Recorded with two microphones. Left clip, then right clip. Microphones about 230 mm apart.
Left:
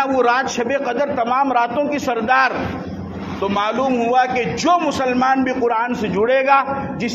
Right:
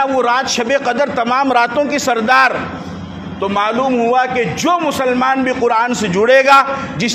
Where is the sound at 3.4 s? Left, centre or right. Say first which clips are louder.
Right 4 dB; right.